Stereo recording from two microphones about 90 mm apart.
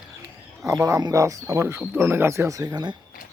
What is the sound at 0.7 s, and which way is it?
Speech, 45° right (ahead or behind).